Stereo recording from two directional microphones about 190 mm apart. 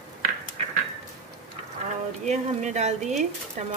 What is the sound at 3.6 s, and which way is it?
Speech, 35° right (ahead or behind).